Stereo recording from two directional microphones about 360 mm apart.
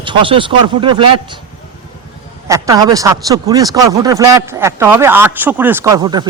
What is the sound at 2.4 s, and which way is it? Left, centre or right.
Speech, centre.